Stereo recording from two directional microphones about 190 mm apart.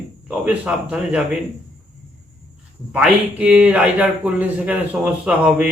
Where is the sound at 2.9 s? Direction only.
5° right (ahead or behind).